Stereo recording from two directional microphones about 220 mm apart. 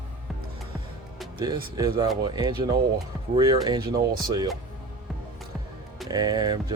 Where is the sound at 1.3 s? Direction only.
20° right (ahead or behind).